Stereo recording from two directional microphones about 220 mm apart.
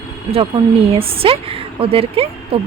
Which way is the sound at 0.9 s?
25° right (ahead or behind).